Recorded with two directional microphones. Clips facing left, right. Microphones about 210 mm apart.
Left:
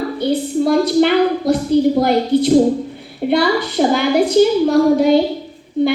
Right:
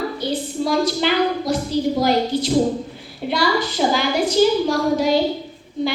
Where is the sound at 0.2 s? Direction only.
60° left (ahead or behind).